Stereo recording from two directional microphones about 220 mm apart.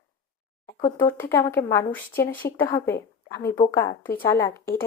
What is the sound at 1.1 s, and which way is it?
Speech, 10° left (ahead or behind).